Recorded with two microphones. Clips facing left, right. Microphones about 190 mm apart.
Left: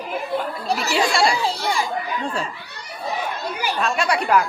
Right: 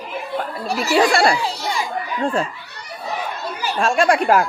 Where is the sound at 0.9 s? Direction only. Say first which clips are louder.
Right 5 dB; 55° right (ahead or behind).